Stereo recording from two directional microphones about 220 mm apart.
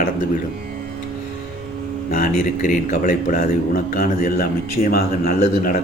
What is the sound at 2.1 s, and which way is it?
A man's voice, 40° left (ahead or behind).